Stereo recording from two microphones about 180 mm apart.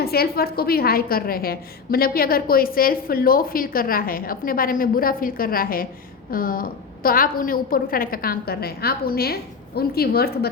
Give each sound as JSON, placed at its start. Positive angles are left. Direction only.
{"t": 0.0, "sound": "a woman's voice", "side_deg": 60}